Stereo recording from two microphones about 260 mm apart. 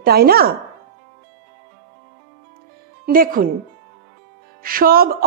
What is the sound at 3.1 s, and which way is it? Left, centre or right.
Speech, right.